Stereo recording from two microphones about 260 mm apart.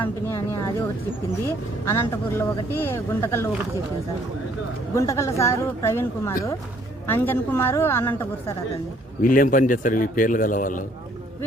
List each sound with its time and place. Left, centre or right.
0.0 s speech: centre
4.9 s speech: centre
9.2 s a man's voice: left